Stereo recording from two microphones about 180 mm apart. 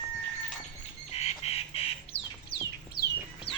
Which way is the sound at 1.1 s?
35° left (ahead or behind).